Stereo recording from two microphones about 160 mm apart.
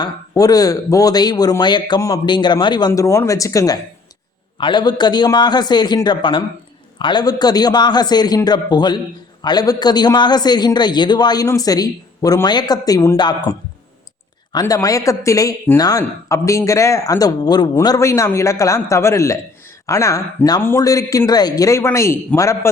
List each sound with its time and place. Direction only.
0.0 s a man's voice: 25° left (ahead or behind)